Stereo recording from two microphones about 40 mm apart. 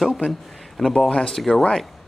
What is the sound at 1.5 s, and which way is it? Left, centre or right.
Speech, centre.